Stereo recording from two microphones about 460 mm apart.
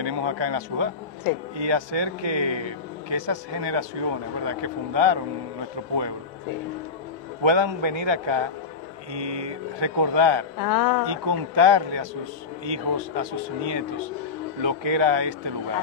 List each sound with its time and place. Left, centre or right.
0.0 s a man's voice: right
7.4 s a man's voice: right
10.6 s speech: left
11.1 s speech: right
14.6 s a man's voice: right